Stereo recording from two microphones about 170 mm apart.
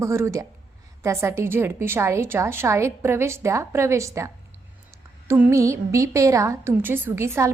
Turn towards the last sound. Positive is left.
turn(degrees=-15)  # may be behind; listen again after turning